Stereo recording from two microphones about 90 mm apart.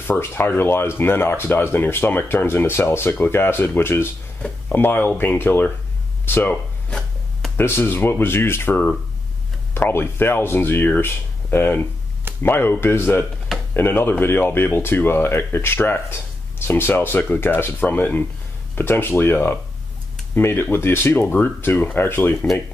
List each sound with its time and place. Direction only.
0.0 s speech: 25° left (ahead or behind)
6.5 s a sound: 10° left (ahead or behind)
7.5 s speech: 25° left (ahead or behind)